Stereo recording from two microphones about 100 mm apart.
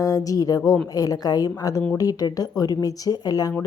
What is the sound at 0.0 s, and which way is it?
Speech, 35° left (ahead or behind).